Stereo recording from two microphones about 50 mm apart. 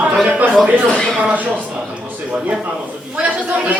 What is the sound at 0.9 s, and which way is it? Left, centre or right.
Speech, centre.